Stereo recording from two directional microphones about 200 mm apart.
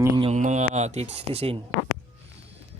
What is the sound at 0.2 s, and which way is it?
Speech, 35° right (ahead or behind).